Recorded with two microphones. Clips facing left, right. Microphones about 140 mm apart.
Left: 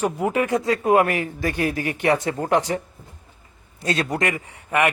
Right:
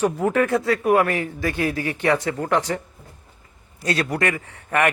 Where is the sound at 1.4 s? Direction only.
45° left (ahead or behind).